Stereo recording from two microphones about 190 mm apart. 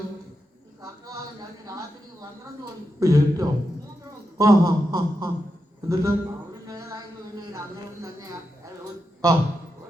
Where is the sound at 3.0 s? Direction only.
20° right (ahead or behind).